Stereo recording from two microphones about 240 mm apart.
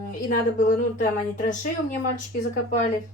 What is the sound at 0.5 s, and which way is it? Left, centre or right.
Speech, left.